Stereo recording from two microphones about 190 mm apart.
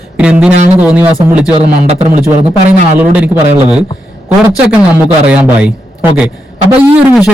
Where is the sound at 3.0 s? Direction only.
5° right (ahead or behind).